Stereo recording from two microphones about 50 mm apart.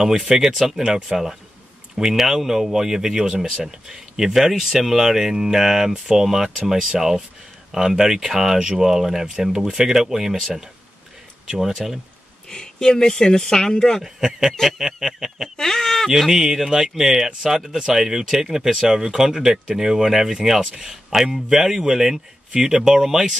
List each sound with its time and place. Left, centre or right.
0.0 s speech: centre
12.4 s speech: centre
14.0 s speech: centre
15.5 s speech: centre
16.1 s speech: centre